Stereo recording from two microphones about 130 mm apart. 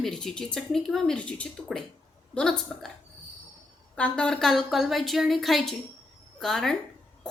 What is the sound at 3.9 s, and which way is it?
A woman's voice, 10° left (ahead or behind).